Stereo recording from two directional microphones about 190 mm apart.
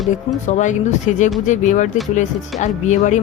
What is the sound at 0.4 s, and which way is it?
A woman's voice, 40° left (ahead or behind).